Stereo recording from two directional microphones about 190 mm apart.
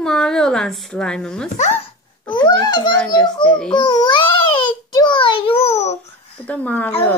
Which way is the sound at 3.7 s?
25° left (ahead or behind).